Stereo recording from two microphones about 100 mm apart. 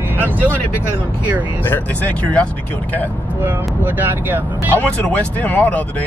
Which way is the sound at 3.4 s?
20° right (ahead or behind).